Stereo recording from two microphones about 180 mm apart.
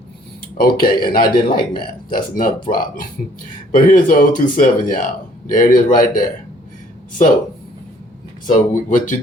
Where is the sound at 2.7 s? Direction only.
40° left (ahead or behind).